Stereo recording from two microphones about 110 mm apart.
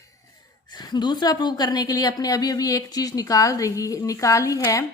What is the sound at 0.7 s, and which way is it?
A woman's voice, 40° left (ahead or behind).